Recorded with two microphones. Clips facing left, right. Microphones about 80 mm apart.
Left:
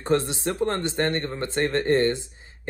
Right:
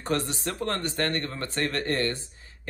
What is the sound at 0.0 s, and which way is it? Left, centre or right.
A man's voice, left.